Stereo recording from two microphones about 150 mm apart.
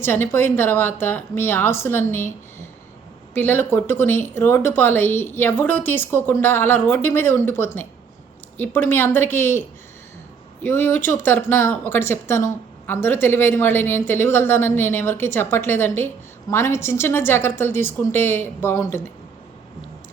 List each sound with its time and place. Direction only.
0.0 s a woman's voice: 15° left (ahead or behind)